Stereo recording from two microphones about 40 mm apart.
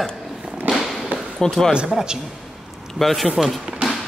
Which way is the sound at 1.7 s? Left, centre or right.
Right.